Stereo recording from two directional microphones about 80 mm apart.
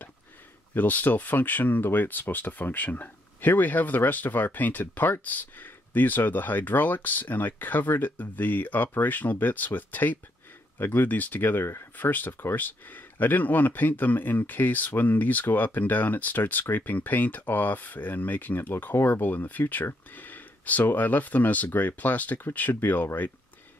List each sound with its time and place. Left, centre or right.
0.7 s speech: left